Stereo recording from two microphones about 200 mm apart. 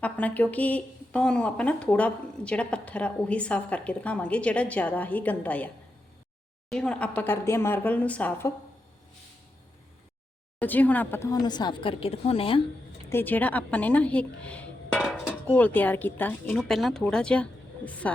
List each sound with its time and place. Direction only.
0.0 s a woman's voice: 5° left (ahead or behind)
10.6 s a woman's voice: 10° left (ahead or behind); by 12.6 s 25° left (ahead or behind)
13.1 s a woman's voice: 10° left (ahead or behind)